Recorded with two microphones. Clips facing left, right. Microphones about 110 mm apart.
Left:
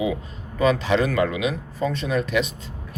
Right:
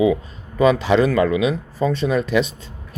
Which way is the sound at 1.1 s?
30° right (ahead or behind).